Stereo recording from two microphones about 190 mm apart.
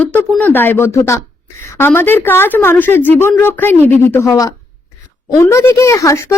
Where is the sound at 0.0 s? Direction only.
5° left (ahead or behind).